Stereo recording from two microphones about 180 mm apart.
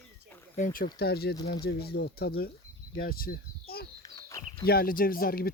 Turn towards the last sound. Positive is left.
turn(degrees=55)  # may be behind; listen again after turning